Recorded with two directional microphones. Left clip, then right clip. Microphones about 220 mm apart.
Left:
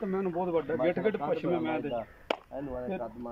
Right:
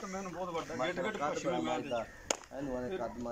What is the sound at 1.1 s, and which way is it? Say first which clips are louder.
Speech: left 5 dB; 45° left (ahead or behind).